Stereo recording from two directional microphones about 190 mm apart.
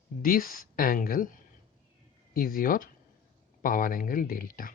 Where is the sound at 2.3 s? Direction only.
50° left (ahead or behind).